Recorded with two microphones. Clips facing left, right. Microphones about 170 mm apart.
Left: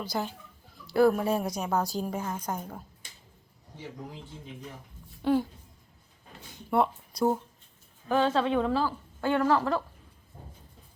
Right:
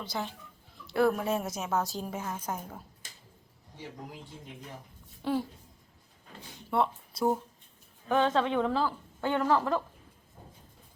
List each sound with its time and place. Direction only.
0.0 s a woman's voice: centre (ahead or behind)
5.2 s a woman's voice: centre (ahead or behind)
6.7 s speech: 5° left (ahead or behind)
9.2 s speech: 15° right (ahead or behind)